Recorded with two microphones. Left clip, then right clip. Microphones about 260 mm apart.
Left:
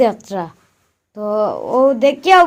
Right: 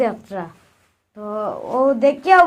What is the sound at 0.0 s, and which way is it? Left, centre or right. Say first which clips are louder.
A woman's voice: left 6 dB; left.